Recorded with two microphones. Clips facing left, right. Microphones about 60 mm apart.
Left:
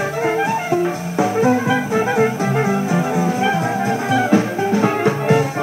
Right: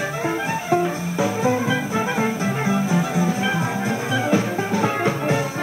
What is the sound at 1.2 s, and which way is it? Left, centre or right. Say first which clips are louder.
Music: left 5 dB; left.